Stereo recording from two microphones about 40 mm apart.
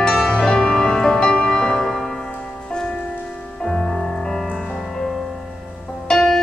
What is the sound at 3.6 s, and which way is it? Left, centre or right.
Music, left.